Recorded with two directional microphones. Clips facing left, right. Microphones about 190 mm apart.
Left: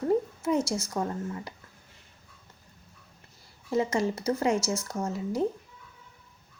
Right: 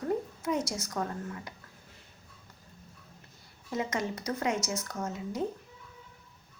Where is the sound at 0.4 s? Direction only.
30° left (ahead or behind).